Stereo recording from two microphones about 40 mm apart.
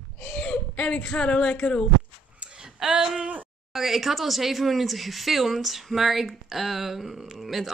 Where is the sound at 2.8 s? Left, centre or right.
Right.